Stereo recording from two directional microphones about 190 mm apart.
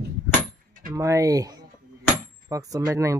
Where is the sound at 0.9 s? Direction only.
15° right (ahead or behind).